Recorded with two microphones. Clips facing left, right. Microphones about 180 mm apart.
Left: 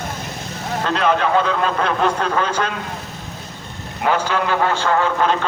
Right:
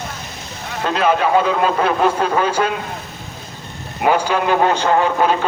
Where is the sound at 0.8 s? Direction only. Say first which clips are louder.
Right 2 dB; 5° right (ahead or behind).